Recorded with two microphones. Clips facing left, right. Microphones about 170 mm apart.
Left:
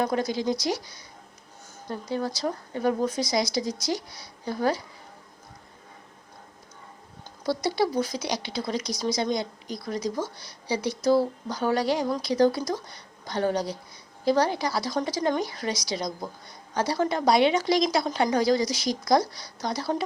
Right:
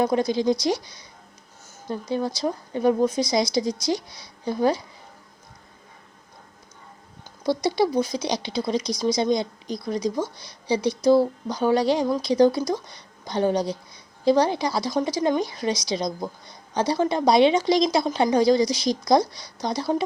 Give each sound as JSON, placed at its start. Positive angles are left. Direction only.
{"t": 0.0, "sound": "speech", "side_deg": -20}
{"t": 1.9, "sound": "speech", "side_deg": -20}
{"t": 7.4, "sound": "a woman's voice", "side_deg": -20}